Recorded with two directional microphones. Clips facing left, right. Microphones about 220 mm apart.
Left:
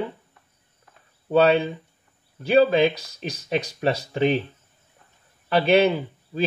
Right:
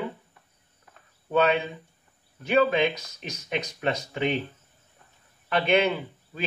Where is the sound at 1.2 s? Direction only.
35° left (ahead or behind).